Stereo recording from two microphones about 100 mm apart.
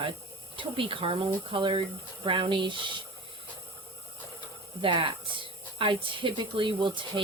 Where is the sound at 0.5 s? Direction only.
60° right (ahead or behind).